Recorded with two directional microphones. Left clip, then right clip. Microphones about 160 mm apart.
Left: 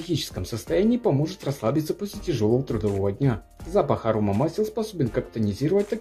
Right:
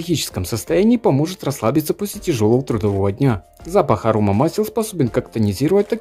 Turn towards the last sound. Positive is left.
turn(degrees=-40)  # may be behind; listen again after turning